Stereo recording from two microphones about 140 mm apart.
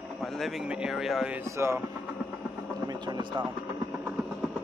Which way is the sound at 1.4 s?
20° right (ahead or behind).